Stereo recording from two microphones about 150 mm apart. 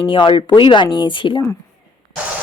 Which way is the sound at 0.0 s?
30° left (ahead or behind).